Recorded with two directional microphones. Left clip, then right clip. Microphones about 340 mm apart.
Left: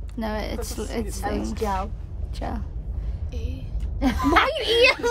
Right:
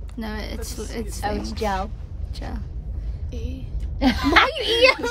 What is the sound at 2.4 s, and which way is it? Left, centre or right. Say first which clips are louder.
Speech: left 5 dB; centre.